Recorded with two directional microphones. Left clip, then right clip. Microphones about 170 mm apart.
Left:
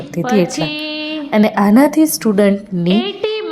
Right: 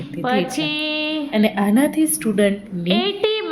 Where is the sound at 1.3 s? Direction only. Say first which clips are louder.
Left 9 dB; 25° left (ahead or behind).